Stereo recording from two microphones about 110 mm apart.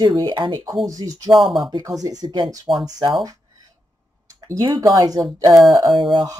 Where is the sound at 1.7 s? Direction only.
35° right (ahead or behind).